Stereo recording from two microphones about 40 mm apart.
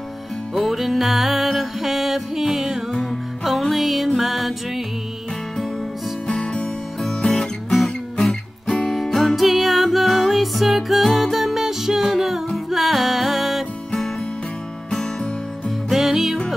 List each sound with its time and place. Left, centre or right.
0.6 s music: centre
6.2 s music: left; by 13.7 s centre
15.9 s music: centre